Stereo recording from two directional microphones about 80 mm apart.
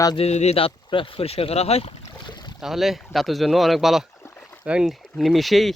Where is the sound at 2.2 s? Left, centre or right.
Left.